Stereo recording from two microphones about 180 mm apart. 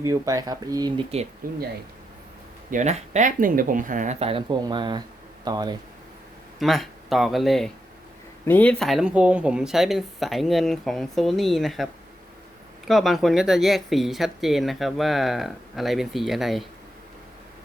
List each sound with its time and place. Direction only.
0.0 s speech: 20° right (ahead or behind)
1.4 s speech: 50° right (ahead or behind)
2.6 s speech: 40° right (ahead or behind); by 5.7 s 20° right (ahead or behind)
6.6 s speech: centre (ahead or behind)
12.9 s speech: centre (ahead or behind)